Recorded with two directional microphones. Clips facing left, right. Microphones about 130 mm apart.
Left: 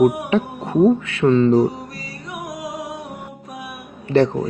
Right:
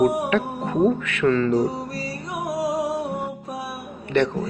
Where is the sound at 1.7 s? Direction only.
35° right (ahead or behind).